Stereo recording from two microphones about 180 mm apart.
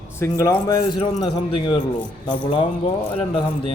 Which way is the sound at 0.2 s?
15° left (ahead or behind).